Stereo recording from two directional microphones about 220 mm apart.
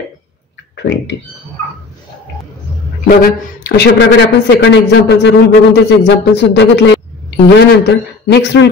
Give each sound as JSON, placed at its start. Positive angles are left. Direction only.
{"t": 0.7, "sound": "speech", "side_deg": 50}
{"t": 3.1, "sound": "a man's voice", "side_deg": 40}